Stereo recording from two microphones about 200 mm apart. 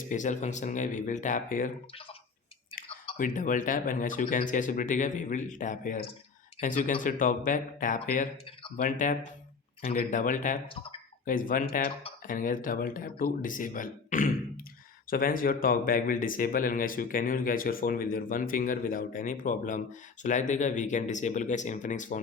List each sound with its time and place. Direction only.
0.1 s speech: 40° left (ahead or behind)
1.9 s speech: 25° left (ahead or behind)
3.2 s speech: 40° left (ahead or behind)